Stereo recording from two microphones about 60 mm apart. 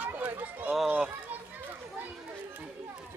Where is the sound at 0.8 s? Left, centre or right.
Centre.